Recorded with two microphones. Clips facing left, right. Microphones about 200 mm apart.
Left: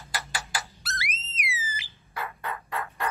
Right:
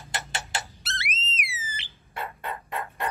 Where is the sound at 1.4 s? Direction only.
30° right (ahead or behind).